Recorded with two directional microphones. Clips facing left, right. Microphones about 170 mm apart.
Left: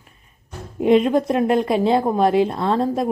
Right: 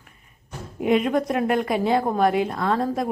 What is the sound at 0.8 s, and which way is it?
Speech, 25° left (ahead or behind).